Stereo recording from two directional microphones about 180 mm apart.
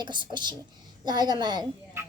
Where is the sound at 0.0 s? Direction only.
25° right (ahead or behind).